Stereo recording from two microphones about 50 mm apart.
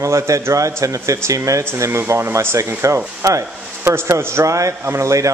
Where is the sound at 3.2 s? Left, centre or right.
Right.